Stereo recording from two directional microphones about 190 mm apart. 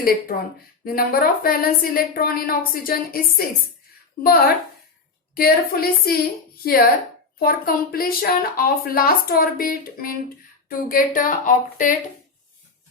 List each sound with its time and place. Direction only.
0.0 s speech: 50° left (ahead or behind)